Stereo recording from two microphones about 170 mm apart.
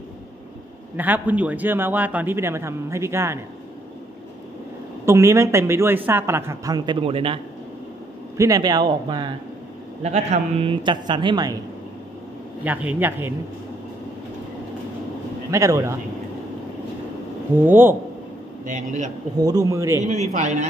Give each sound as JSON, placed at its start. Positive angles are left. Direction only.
{"t": 0.9, "sound": "a man's voice", "side_deg": -10}
{"t": 5.0, "sound": "a man's voice", "side_deg": -15}
{"t": 8.4, "sound": "a man's voice", "side_deg": -20}
{"t": 10.0, "sound": "a man's voice", "side_deg": -40}
{"t": 12.6, "sound": "a man's voice", "side_deg": -10}
{"t": 15.5, "sound": "a man's voice", "side_deg": -20}
{"t": 17.6, "sound": "a man's voice", "side_deg": -10}
{"t": 18.7, "sound": "a man's voice", "side_deg": -45}
{"t": 19.3, "sound": "a man's voice", "side_deg": -20}
{"t": 20.1, "sound": "a man's voice", "side_deg": -45}